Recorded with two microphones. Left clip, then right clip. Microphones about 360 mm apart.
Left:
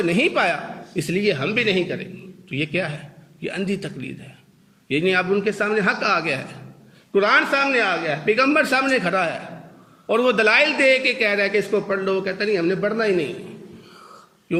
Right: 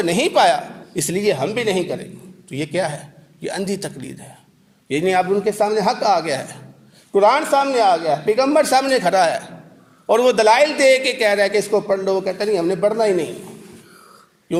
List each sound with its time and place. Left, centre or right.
0.0 s a man's voice: right